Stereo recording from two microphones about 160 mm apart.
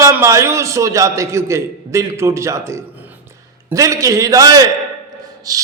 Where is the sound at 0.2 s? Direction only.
20° right (ahead or behind).